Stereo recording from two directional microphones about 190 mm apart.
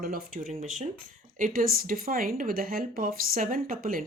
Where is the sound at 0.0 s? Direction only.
50° right (ahead or behind).